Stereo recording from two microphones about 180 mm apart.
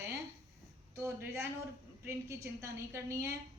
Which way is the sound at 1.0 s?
15° right (ahead or behind).